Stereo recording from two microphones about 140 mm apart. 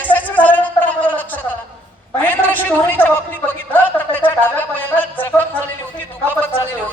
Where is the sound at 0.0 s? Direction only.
10° left (ahead or behind).